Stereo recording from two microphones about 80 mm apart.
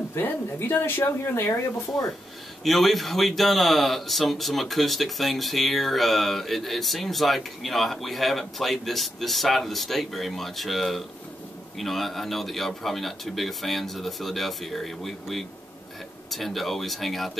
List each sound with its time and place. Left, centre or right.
0.1 s speech: left
2.6 s speech: centre